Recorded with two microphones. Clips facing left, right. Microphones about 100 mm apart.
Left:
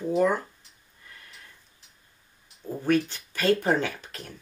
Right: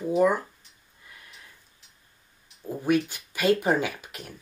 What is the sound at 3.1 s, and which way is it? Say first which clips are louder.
Speech: right 1 dB; 10° right (ahead or behind).